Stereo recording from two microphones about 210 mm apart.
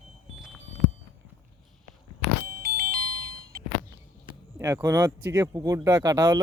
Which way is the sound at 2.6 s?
45° right (ahead or behind).